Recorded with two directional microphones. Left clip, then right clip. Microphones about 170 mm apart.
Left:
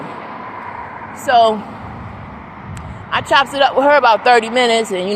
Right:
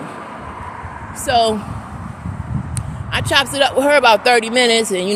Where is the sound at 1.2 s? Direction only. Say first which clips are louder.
Left 4 dB; 35° right (ahead or behind).